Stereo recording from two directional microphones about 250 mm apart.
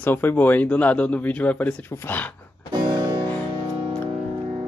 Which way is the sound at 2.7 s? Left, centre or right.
Centre.